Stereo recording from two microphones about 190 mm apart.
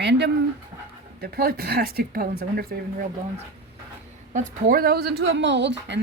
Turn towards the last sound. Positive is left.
turn(degrees=-65)  # may be behind; listen again after turning